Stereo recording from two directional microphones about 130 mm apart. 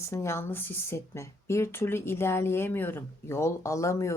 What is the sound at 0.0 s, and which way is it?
Speech, 20° left (ahead or behind).